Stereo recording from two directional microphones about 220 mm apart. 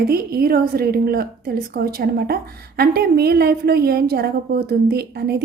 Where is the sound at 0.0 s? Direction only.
45° right (ahead or behind).